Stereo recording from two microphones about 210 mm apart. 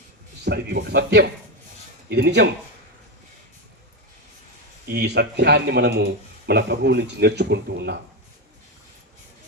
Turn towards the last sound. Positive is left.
turn(degrees=-50)  # may be behind; listen again after turning